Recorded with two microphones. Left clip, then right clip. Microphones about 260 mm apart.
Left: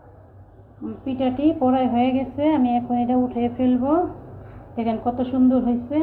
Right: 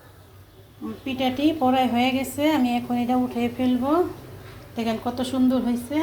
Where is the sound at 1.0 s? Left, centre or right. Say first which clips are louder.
Left 2 dB; right.